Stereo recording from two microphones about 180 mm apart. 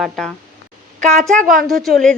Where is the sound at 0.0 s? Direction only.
Centre (ahead or behind).